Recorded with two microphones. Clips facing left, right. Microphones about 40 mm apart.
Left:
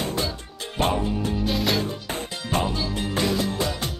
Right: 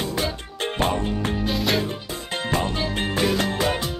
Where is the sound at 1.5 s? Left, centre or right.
Centre.